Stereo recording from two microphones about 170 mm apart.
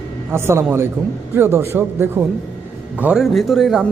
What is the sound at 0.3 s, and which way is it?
A man's voice, 15° right (ahead or behind).